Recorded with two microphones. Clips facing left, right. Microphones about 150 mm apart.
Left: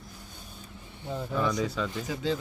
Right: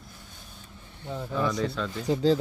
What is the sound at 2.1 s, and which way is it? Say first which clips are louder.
Speech: right 10 dB; 35° right (ahead or behind).